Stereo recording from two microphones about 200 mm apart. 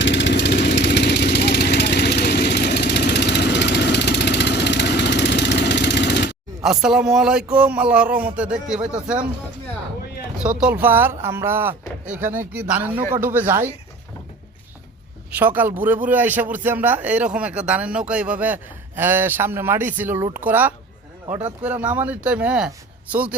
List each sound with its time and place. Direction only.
0.0 s vehicle: 65° left (ahead or behind)
6.6 s a man's voice: centre (ahead or behind)
10.6 s speech: 10° right (ahead or behind)
15.4 s speech: 10° right (ahead or behind)